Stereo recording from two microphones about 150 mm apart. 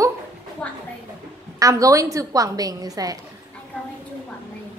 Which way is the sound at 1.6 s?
20° right (ahead or behind).